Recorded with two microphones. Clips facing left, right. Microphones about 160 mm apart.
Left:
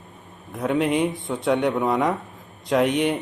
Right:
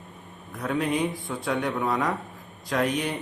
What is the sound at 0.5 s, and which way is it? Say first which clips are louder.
Speech: left 5 dB; 20° left (ahead or behind).